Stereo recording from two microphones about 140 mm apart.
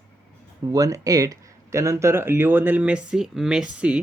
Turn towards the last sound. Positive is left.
turn(degrees=-5)  # may be behind; listen again after turning